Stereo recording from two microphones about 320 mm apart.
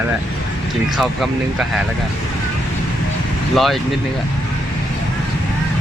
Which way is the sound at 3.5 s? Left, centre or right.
Centre.